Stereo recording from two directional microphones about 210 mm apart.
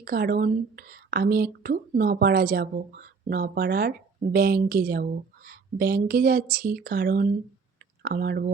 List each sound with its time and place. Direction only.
0.0 s a woman's voice: 45° right (ahead or behind)